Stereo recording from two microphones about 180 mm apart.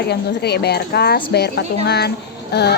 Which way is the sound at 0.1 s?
65° left (ahead or behind).